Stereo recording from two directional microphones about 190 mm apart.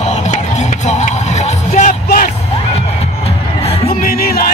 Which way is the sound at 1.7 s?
45° left (ahead or behind).